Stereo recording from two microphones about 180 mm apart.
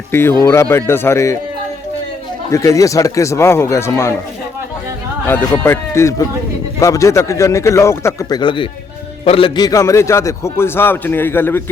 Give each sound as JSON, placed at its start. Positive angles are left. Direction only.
{"t": 0.1, "sound": "a man's voice", "side_deg": 15}
{"t": 2.5, "sound": "a man's voice", "side_deg": 20}
{"t": 5.3, "sound": "a man's voice", "side_deg": 10}